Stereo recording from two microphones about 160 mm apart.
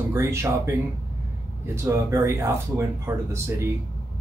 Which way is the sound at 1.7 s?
15° right (ahead or behind).